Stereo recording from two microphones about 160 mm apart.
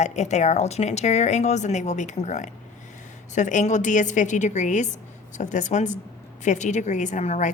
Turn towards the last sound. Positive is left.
turn(degrees=45)  # may be behind; listen again after turning